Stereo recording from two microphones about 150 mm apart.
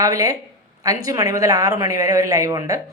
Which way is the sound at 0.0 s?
20° right (ahead or behind).